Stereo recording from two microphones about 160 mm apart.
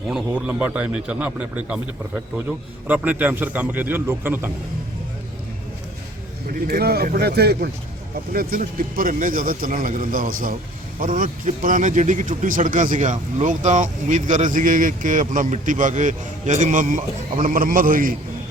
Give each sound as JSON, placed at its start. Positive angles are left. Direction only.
{"t": 0.1, "sound": "a man's voice", "side_deg": -5}
{"t": 6.5, "sound": "speech", "side_deg": -75}
{"t": 8.3, "sound": "a man's voice", "side_deg": -65}